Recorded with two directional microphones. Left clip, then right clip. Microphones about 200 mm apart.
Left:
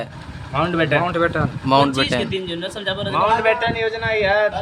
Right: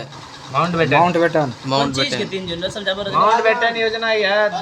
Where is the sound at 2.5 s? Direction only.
25° left (ahead or behind).